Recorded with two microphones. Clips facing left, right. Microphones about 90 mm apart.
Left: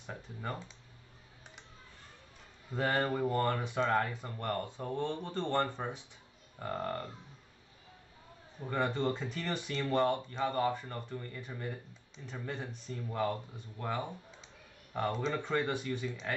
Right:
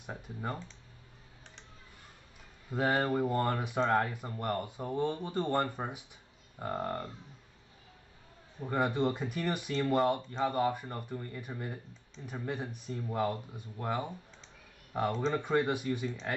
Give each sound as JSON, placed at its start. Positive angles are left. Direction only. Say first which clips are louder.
{"t": 0.0, "sound": "computer keyboard", "louder": "right 2 dB", "side_deg": -10}
{"t": 2.7, "sound": "speech", "louder": "right 2 dB", "side_deg": -10}
{"t": 8.5, "sound": "speech", "louder": "right 3 dB", "side_deg": -15}